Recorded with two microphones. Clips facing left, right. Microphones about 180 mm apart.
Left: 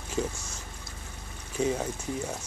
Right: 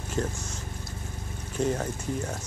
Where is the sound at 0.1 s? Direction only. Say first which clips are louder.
Right 1 dB; 5° left (ahead or behind).